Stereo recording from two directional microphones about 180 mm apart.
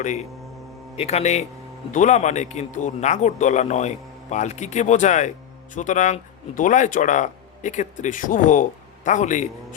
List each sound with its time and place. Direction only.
0.0 s speech: 40° left (ahead or behind)